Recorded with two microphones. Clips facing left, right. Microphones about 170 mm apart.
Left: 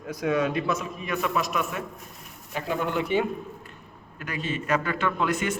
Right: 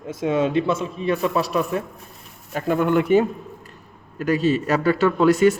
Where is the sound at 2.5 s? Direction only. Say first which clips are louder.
Right 8 dB; 50° right (ahead or behind).